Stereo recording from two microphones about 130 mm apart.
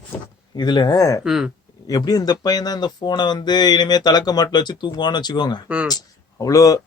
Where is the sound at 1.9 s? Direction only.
30° left (ahead or behind).